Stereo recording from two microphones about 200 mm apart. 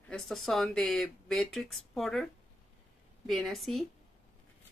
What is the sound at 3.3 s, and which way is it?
Speech, centre (ahead or behind).